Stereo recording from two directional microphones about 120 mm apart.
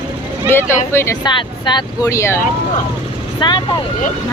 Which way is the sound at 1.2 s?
40° left (ahead or behind).